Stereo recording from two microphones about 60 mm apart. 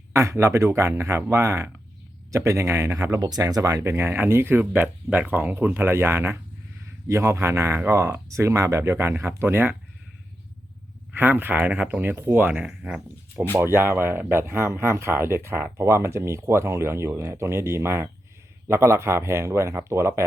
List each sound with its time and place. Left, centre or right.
0.1 s speech: right
3.9 s speech: right
8.3 s speech: right
11.1 s speech: right
12.6 s speech: centre
13.5 s speech: right